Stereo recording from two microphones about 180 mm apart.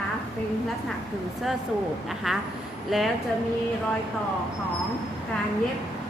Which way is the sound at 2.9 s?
Centre (ahead or behind).